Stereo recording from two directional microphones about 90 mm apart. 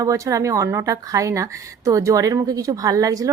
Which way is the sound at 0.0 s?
40° right (ahead or behind).